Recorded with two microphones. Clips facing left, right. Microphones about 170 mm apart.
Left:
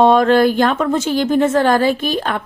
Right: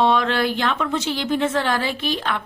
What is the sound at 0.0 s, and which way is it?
A woman's voice, 45° left (ahead or behind).